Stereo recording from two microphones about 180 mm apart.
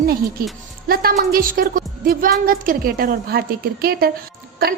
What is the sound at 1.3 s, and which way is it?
A woman's voice, 50° right (ahead or behind).